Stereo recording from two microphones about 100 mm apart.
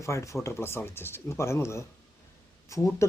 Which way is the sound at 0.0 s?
30° left (ahead or behind).